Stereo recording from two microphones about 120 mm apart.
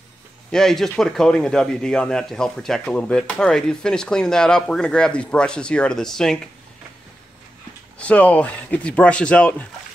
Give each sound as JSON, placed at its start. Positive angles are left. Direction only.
{"t": 0.5, "sound": "speech", "side_deg": 5}
{"t": 8.0, "sound": "speech", "side_deg": 10}